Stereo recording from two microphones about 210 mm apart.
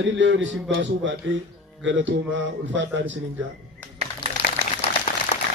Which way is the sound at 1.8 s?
60° right (ahead or behind).